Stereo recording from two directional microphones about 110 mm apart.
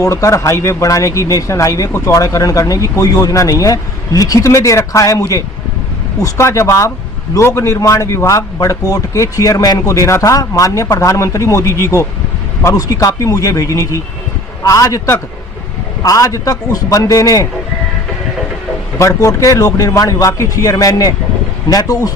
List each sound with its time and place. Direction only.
0.0 s a man's voice: 30° left (ahead or behind)
18.9 s a man's voice: 30° left (ahead or behind)